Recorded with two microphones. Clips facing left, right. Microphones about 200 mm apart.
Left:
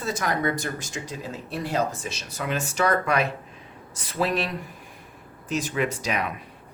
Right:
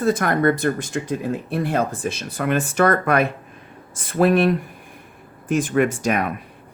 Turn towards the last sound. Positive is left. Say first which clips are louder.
# right 7 dB
turn(degrees=-50)  # may be behind; listen again after turning